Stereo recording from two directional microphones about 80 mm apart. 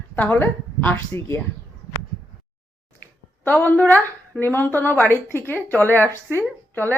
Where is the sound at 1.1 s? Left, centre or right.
Left.